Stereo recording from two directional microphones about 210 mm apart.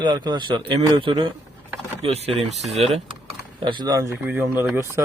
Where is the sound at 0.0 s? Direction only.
20° right (ahead or behind).